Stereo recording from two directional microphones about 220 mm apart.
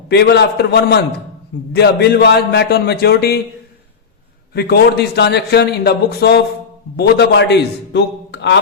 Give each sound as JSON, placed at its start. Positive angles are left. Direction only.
{"t": 0.1, "sound": "a man's voice", "side_deg": 50}
{"t": 4.5, "sound": "a man's voice", "side_deg": 45}